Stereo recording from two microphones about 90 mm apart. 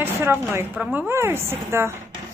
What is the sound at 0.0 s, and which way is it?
A woman's voice, 25° right (ahead or behind).